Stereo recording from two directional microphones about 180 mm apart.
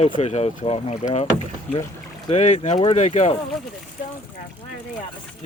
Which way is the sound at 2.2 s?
40° left (ahead or behind).